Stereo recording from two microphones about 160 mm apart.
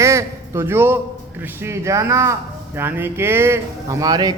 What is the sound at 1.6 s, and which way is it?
A man's voice, 15° right (ahead or behind).